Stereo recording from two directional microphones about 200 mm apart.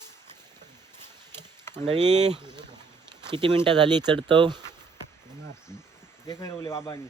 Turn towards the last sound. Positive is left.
turn(degrees=15)  # may be behind; listen again after turning